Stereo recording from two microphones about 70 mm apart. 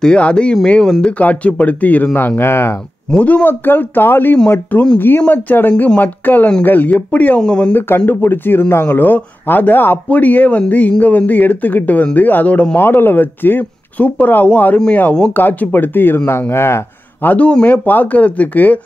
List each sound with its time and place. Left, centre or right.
0.0 s speech: centre; by 2.8 s left
3.1 s speech: centre
8.1 s a man's voice: left
17.3 s speech: centre